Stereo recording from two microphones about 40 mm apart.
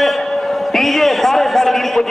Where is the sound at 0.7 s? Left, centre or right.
Centre.